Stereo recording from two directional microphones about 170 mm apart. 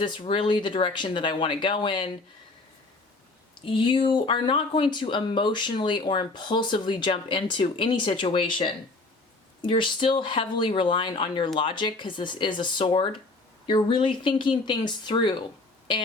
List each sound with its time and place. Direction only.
0.0 s speech: 30° left (ahead or behind)
3.5 s speech: 30° left (ahead or behind)